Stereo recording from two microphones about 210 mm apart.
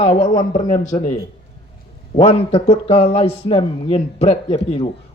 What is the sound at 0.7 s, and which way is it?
Speech, 35° left (ahead or behind).